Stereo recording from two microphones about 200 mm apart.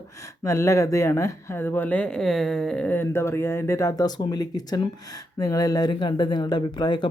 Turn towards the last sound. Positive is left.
turn(degrees=20)  # may be behind; listen again after turning